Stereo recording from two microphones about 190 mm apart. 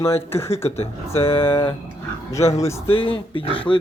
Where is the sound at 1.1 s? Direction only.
30° left (ahead or behind).